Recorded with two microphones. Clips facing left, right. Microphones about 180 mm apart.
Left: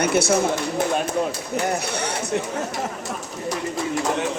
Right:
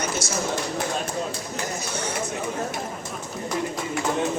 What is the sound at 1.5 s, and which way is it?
Speech, 65° left (ahead or behind).